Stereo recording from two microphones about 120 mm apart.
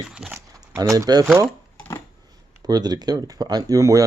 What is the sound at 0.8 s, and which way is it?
Speech, 30° right (ahead or behind).